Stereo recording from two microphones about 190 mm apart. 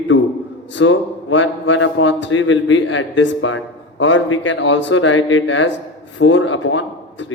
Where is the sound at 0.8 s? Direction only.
80° left.